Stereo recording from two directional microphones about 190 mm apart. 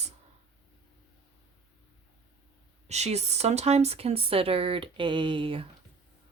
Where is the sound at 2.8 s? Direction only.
35° right (ahead or behind).